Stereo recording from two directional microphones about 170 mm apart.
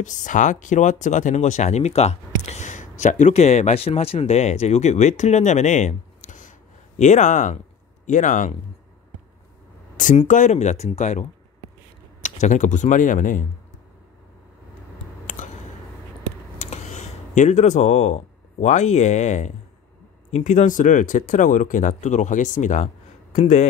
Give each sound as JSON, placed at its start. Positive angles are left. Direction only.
{"t": 0.0, "sound": "speech", "side_deg": 45}
{"t": 9.9, "sound": "speech", "side_deg": 50}
{"t": 15.4, "sound": "a sound", "side_deg": 50}
{"t": 16.5, "sound": "speech", "side_deg": 40}